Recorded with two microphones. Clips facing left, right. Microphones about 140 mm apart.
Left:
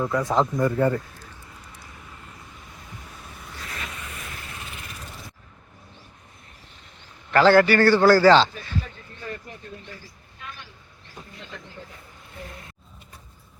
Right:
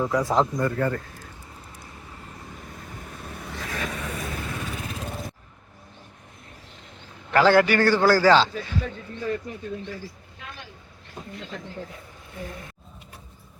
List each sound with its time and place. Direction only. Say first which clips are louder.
0.0 s speech: even; centre (ahead or behind)
0.6 s a man's voice: left 3 dB; 15° left (ahead or behind)
3.2 s vehicle: right 6 dB; 70° right (ahead or behind)
7.3 s a man's voice: left 2 dB; 10° right (ahead or behind)